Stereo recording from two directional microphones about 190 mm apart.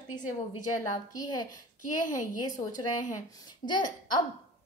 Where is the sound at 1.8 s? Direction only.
40° left (ahead or behind).